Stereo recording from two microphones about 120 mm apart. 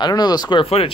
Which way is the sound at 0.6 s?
55° left (ahead or behind).